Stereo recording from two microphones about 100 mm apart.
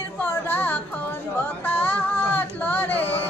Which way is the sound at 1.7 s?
20° left (ahead or behind).